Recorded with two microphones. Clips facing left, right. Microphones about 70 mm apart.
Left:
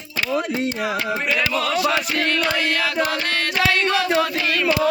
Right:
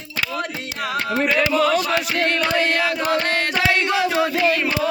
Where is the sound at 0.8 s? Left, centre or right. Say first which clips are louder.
Right 1 dB; right.